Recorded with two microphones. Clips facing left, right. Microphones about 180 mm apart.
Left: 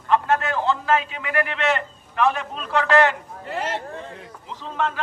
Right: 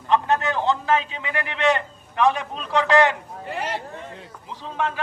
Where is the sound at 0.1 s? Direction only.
20° right (ahead or behind).